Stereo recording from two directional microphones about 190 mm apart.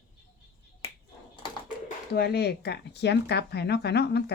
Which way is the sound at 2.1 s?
60° left (ahead or behind).